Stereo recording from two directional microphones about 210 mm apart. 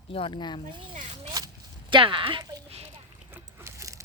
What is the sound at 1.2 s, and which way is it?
Zipper, 20° right (ahead or behind).